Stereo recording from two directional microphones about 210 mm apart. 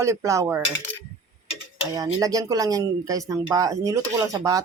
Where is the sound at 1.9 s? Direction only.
15° right (ahead or behind).